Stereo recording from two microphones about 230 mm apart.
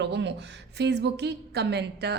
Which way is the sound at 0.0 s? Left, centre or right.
Right.